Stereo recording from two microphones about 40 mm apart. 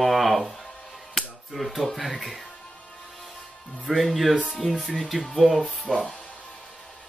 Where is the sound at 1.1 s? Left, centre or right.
Centre.